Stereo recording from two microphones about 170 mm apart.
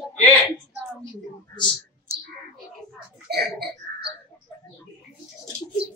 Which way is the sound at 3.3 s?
70° right (ahead or behind).